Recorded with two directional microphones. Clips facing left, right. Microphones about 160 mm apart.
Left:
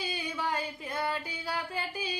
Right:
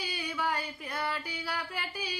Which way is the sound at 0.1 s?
20° left (ahead or behind).